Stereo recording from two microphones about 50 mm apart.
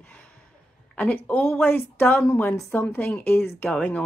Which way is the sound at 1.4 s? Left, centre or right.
Left.